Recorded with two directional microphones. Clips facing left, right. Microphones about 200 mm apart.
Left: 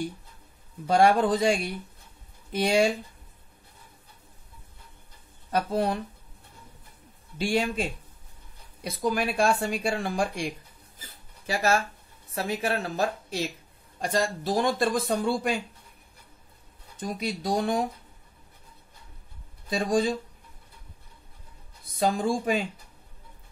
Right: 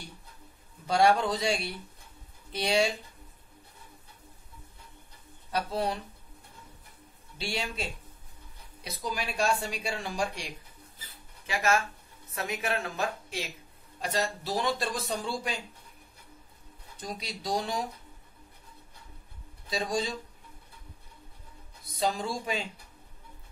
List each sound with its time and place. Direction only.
0.8 s speech: 50° left (ahead or behind)
5.5 s speech: 50° left (ahead or behind)
7.3 s speech: 50° left (ahead or behind)
8.8 s speech: 55° left (ahead or behind)
11.0 s a sound: 45° left (ahead or behind)
12.4 s speech: 35° left (ahead or behind)
14.0 s speech: 50° left (ahead or behind)
16.9 s speech: 55° left (ahead or behind)
19.7 s speech: 50° left (ahead or behind)
21.9 s speech: 50° left (ahead or behind)